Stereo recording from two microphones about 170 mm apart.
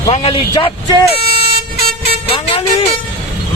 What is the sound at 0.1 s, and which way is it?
Speech, 35° left (ahead or behind).